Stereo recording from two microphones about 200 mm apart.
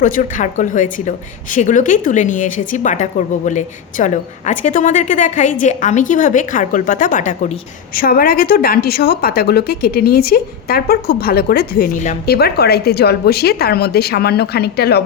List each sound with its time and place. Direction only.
0.0 s a woman's voice: 40° left (ahead or behind)